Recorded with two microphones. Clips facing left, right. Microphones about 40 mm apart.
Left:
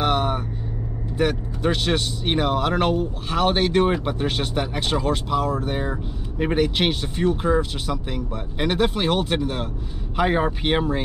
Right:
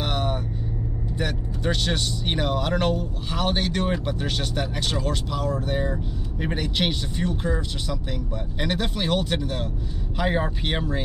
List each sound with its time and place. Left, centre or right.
0.0 s vehicle: centre
1.1 s speech: centre